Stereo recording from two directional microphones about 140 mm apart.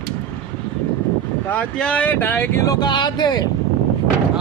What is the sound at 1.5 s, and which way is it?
Speech, 10° left (ahead or behind).